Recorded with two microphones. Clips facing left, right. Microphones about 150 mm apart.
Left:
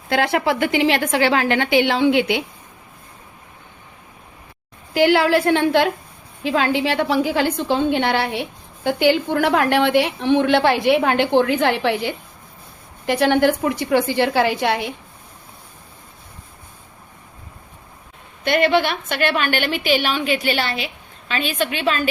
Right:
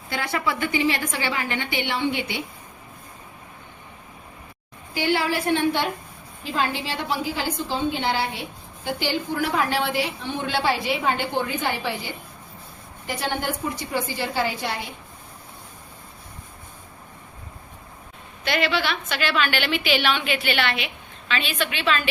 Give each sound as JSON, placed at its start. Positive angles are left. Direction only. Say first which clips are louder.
{"t": 0.1, "sound": "a woman's voice", "louder": "left 8 dB", "side_deg": 85}
{"t": 4.9, "sound": "a woman's voice", "louder": "left 8 dB", "side_deg": 90}
{"t": 18.4, "sound": "a woman's voice", "louder": "left 7 dB", "side_deg": 55}